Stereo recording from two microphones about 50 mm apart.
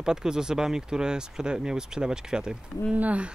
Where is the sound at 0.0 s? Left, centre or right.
Centre.